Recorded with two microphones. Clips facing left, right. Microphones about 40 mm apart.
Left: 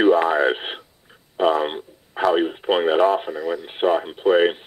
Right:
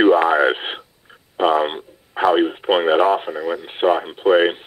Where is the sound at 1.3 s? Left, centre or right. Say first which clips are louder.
Right 2 dB; centre.